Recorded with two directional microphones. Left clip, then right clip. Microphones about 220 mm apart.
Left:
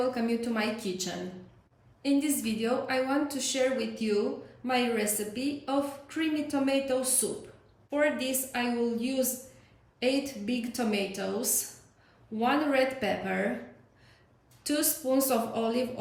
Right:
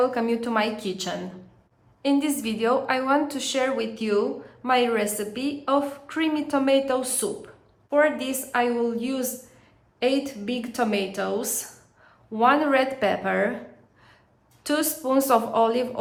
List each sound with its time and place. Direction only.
0.0 s a woman's voice: 5° right (ahead or behind)
14.6 s a woman's voice: 5° right (ahead or behind)